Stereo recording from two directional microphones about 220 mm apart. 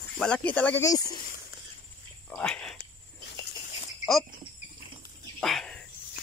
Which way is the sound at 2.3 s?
5° left (ahead or behind).